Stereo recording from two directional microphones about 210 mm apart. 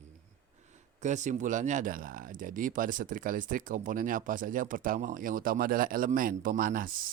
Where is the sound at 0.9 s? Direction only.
35° right (ahead or behind).